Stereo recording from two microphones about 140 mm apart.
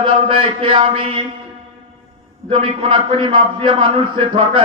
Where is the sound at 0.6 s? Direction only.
35° right (ahead or behind).